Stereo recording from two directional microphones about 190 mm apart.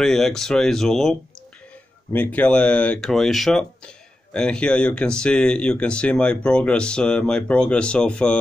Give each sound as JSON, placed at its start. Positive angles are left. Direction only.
{"t": 0.0, "sound": "speech", "side_deg": 0}
{"t": 2.1, "sound": "speech", "side_deg": 10}